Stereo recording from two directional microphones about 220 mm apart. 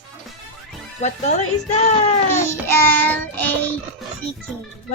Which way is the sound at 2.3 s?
10° left (ahead or behind).